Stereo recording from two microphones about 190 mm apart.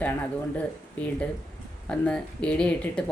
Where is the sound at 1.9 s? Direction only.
5° left (ahead or behind).